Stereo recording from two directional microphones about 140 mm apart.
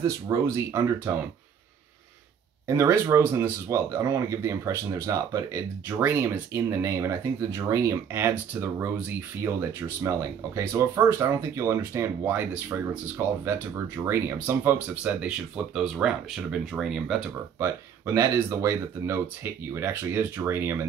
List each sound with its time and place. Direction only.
0.0 s speech: 25° right (ahead or behind)
2.6 s speech: 20° right (ahead or behind)
14.0 s speech: 15° right (ahead or behind)
17.6 s speech: 20° right (ahead or behind)